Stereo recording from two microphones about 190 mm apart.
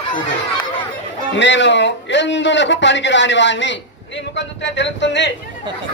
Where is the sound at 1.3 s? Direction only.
70° left (ahead or behind).